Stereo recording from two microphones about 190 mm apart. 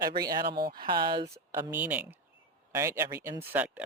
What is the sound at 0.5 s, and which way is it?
Speech, 55° right (ahead or behind).